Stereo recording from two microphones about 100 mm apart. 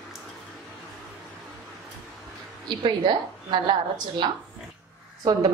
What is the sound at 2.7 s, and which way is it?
A woman's voice, 50° right (ahead or behind).